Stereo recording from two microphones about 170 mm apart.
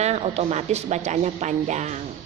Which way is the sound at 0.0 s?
40° right (ahead or behind).